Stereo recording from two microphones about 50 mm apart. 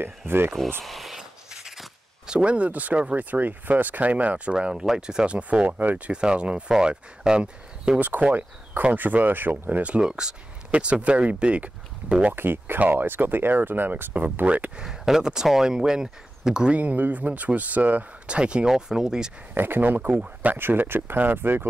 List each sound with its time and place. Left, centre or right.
0.3 s speech: right
0.8 s a sound: centre
2.3 s speech: right
6.2 s speech: centre
8.2 s speech: right
9.9 s speech: centre
12.4 s speech: right
14.8 s speech: centre
16.7 s speech: right
18.2 s speech: right
19.5 s speech: right